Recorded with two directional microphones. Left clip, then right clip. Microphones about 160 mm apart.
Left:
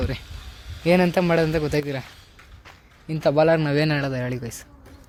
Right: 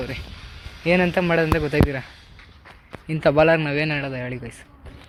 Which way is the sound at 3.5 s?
35° left (ahead or behind).